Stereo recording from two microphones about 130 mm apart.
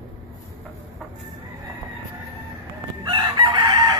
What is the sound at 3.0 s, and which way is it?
Chicken, 35° right (ahead or behind).